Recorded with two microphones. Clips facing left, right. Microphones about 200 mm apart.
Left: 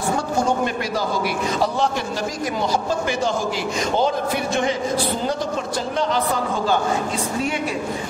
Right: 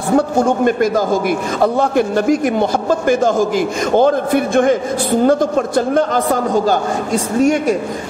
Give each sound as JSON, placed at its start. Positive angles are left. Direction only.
{"t": 0.4, "sound": "a man's voice", "side_deg": -50}